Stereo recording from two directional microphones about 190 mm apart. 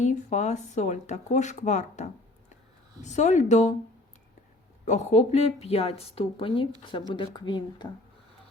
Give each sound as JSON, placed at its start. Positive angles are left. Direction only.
{"t": 0.0, "sound": "a woman's voice", "side_deg": 40}
{"t": 4.9, "sound": "a woman's voice", "side_deg": 35}